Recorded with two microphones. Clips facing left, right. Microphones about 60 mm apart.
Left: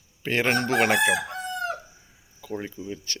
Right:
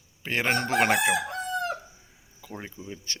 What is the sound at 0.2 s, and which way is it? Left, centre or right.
Chicken, centre.